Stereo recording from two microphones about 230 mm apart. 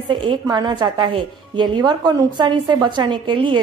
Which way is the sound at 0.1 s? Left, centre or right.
Centre.